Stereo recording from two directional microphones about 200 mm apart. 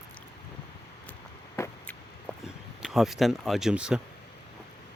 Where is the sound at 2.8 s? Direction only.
Centre (ahead or behind).